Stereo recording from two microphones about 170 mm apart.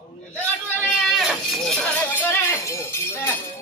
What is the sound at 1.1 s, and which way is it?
Sheep, centre (ahead or behind).